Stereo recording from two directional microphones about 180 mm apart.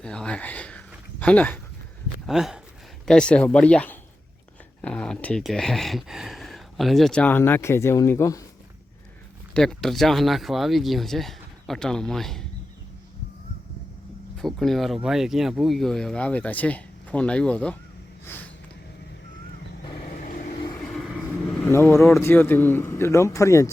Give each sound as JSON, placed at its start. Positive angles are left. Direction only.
{"t": 0.0, "sound": "speech", "side_deg": 5}
{"t": 9.6, "sound": "speech", "side_deg": 0}
{"t": 14.3, "sound": "speech", "side_deg": 0}
{"t": 20.0, "sound": "vehicle", "side_deg": 45}
{"t": 21.7, "sound": "speech", "side_deg": 15}